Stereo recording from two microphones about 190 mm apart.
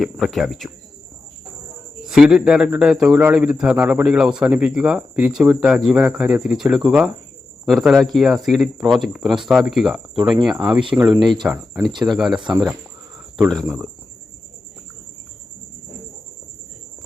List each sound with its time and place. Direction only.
0.0 s a man's voice: centre (ahead or behind)
2.0 s a man's voice: 5° right (ahead or behind)
11.8 s speech: 25° right (ahead or behind)
12.0 s a man's voice: centre (ahead or behind)
12.4 s speech: 25° right (ahead or behind)
13.5 s a man's voice: centre (ahead or behind)